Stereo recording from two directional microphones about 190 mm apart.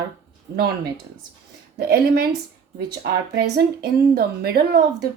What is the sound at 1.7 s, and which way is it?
Speech, 55° right (ahead or behind).